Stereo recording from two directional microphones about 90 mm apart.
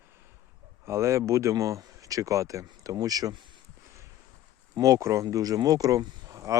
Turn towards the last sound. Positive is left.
turn(degrees=-35)  # may be behind; listen again after turning